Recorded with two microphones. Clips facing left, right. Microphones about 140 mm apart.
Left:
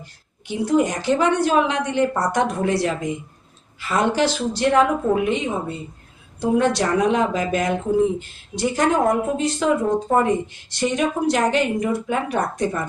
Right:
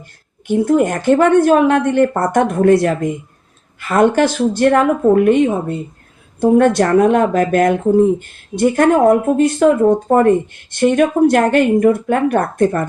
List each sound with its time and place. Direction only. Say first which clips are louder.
0.0 s speech: right 3 dB; 50° right (ahead or behind)